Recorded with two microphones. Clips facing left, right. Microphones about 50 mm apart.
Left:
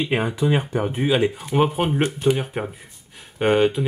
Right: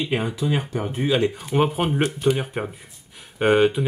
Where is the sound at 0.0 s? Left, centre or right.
Centre.